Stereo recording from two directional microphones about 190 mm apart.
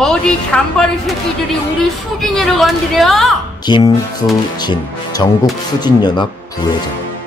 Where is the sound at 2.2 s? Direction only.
Centre (ahead or behind).